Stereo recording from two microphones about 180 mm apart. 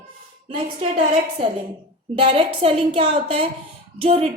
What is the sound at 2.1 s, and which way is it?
A woman's voice, 30° right (ahead or behind).